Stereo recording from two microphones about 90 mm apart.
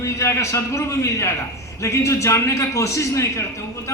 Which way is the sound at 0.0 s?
35° left (ahead or behind).